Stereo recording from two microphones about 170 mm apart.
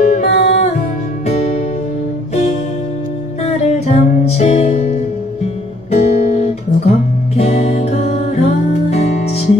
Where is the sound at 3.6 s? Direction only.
40° left (ahead or behind).